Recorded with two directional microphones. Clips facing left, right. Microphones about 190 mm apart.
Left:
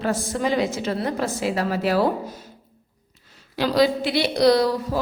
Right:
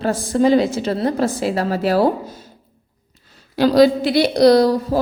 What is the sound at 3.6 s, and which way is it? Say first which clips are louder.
A woman's voice: right 7 dB; 40° right (ahead or behind).